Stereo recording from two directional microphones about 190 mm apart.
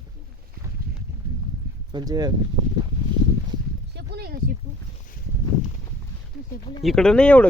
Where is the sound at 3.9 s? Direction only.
55° right (ahead or behind).